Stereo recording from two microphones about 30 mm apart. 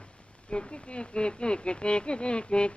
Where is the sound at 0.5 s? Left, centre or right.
Left.